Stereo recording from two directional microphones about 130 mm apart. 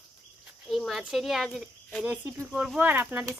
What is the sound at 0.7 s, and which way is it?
Speech, centre (ahead or behind).